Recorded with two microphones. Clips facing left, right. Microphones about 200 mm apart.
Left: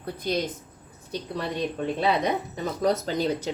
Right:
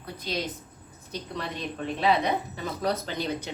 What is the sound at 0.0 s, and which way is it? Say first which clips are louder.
Speech: left 6 dB; 50° left (ahead or behind).